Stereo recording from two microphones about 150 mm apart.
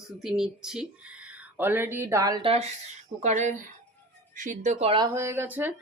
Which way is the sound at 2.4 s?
40° right (ahead or behind).